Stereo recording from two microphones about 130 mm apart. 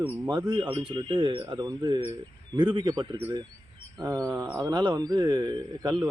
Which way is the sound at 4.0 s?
25° right (ahead or behind).